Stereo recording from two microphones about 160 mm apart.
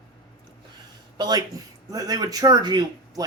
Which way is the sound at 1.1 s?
25° right (ahead or behind).